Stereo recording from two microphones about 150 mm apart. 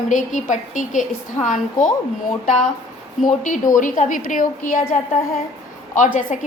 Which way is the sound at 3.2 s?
60° left (ahead or behind).